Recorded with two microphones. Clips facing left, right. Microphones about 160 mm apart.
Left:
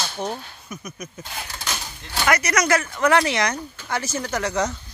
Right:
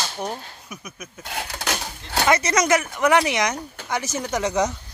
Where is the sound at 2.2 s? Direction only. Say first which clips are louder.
Right 1 dB; 25° right (ahead or behind).